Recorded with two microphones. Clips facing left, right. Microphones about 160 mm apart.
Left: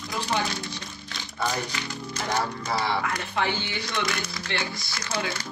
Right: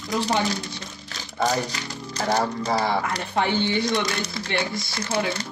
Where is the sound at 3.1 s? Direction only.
60° right (ahead or behind).